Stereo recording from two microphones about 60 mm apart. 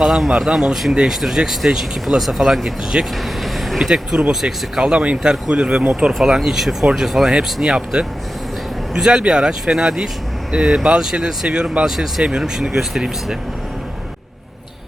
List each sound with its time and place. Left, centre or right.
0.0 s speech: centre